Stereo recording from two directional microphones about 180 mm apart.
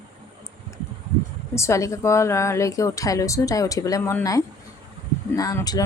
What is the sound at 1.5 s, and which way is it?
A woman's voice, 15° left (ahead or behind).